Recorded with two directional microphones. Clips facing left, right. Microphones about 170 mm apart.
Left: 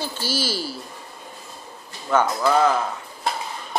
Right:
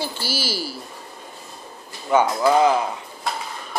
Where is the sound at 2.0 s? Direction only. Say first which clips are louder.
Right 2 dB; 15° right (ahead or behind).